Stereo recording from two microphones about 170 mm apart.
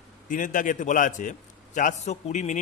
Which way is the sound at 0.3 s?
50° left (ahead or behind).